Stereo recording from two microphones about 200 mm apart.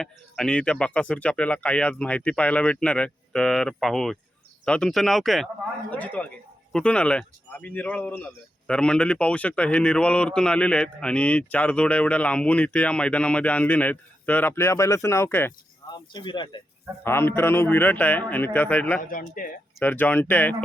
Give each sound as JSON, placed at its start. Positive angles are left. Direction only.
{"t": 0.0, "sound": "speech", "side_deg": 5}
{"t": 16.1, "sound": "speech", "side_deg": 25}
{"t": 17.0, "sound": "speech", "side_deg": 10}
{"t": 19.3, "sound": "speech", "side_deg": 45}
{"t": 19.8, "sound": "speech", "side_deg": 10}